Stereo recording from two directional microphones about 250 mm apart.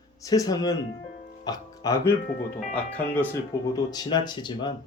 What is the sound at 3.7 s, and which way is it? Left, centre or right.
Speech, centre.